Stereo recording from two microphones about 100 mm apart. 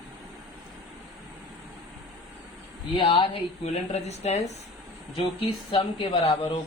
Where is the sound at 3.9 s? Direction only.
90° left.